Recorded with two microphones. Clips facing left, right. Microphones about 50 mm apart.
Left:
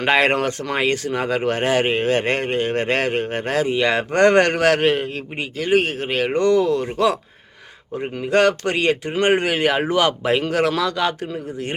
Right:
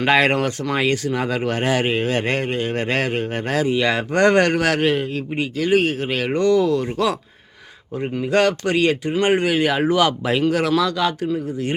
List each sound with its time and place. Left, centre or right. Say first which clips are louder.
0.0 s speech: even; left
5.4 s speech: right 1 dB; left
8.3 s speech: left 1 dB; left
9.9 s speech: even; left